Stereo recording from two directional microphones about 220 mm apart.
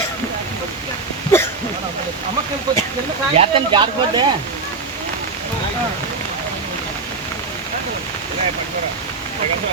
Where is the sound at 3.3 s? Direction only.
20° right (ahead or behind).